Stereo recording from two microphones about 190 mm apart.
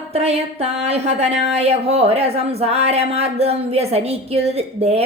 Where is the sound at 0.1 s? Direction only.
30° right (ahead or behind).